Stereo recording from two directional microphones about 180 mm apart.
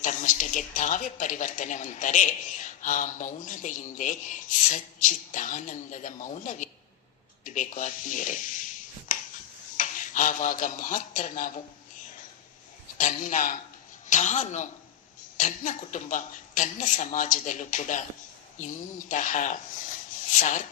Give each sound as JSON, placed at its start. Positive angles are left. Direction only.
{"t": 0.0, "sound": "a woman's voice", "side_deg": 45}
{"t": 9.1, "sound": "a sound", "side_deg": 45}
{"t": 9.7, "sound": "speech", "side_deg": 45}
{"t": 13.0, "sound": "a woman's voice", "side_deg": 45}